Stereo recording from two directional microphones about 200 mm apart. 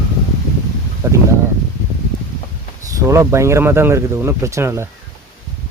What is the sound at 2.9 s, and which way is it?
Speech, 15° right (ahead or behind).